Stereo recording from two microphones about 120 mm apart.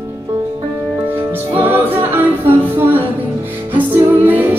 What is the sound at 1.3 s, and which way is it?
Music, 15° right (ahead or behind).